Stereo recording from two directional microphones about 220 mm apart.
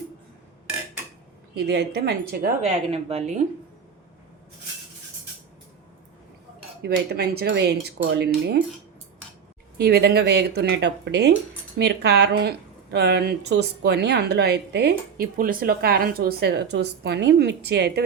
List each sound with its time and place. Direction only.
1.5 s a woman's voice: 50° right (ahead or behind)
2.6 s speech: 30° right (ahead or behind)
6.8 s a woman's voice: 45° right (ahead or behind)
9.8 s a woman's voice: 45° right (ahead or behind)